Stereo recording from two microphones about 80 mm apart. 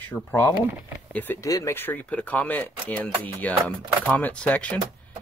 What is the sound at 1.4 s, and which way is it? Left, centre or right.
Speech, left.